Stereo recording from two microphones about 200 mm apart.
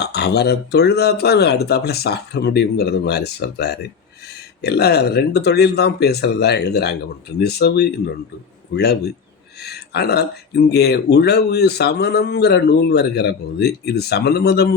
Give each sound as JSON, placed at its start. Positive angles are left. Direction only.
{"t": 0.0, "sound": "speech", "side_deg": 55}